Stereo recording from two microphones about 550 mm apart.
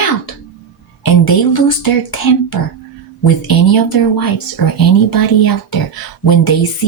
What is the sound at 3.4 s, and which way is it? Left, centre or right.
Speech, left.